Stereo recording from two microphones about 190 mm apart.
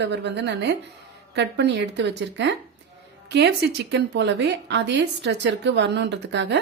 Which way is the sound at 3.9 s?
65° right (ahead or behind).